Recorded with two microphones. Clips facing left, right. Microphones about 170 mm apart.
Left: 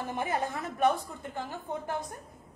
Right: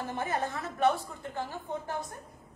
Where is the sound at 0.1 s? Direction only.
15° left (ahead or behind).